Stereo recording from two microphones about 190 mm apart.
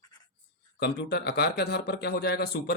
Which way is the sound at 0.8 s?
60° left (ahead or behind).